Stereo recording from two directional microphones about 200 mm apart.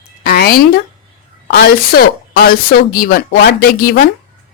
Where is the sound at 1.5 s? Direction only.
50° left (ahead or behind).